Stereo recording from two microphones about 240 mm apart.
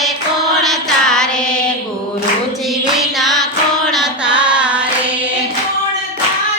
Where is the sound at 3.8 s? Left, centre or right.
Centre.